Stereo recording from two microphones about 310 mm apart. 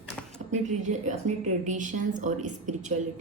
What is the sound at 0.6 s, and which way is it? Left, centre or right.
A woman's voice, right.